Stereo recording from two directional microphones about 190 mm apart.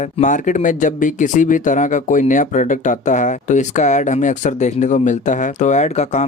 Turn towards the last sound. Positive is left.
turn(degrees=35)  # may be behind; listen again after turning